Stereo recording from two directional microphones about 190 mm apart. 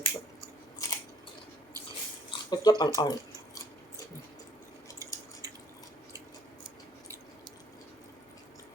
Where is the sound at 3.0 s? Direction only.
20° left (ahead or behind).